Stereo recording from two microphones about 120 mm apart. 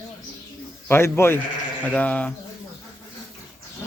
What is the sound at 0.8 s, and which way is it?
Speech, 20° left (ahead or behind).